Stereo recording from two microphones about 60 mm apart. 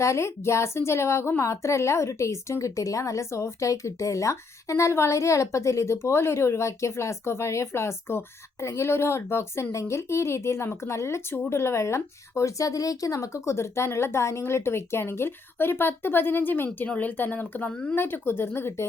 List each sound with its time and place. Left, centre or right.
0.0 s a woman's voice: left
17.7 s speech: centre
17.9 s speech: left